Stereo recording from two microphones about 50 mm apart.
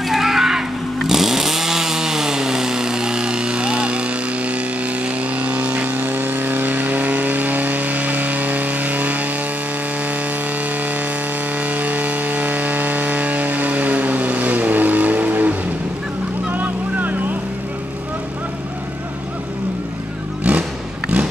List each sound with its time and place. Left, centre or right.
0.0 s chainsaw: centre; by 4.6 s right
5.0 s vehicle: right
5.9 s vehicle: right
11.6 s chainsaw: right
16.4 s boat: right
20.5 s vehicle: right